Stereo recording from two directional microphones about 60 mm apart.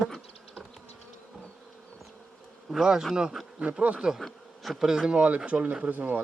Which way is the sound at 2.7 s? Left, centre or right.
Centre.